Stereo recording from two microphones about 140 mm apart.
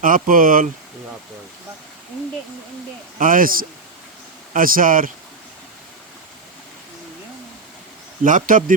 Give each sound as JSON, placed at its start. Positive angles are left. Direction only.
{"t": 0.0, "sound": "speech", "side_deg": -80}
{"t": 3.2, "sound": "speech", "side_deg": -80}
{"t": 8.2, "sound": "speech", "side_deg": -70}